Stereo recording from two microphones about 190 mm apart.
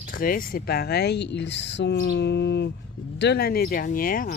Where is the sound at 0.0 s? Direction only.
50° left (ahead or behind).